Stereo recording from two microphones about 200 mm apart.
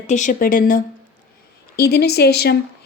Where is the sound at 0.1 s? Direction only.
40° left (ahead or behind).